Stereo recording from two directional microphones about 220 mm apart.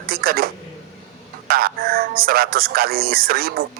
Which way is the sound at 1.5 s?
40° right (ahead or behind).